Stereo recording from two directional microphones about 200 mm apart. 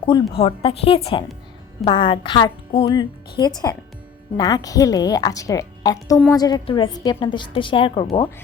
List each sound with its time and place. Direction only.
0.0 s a woman's voice: 25° left (ahead or behind)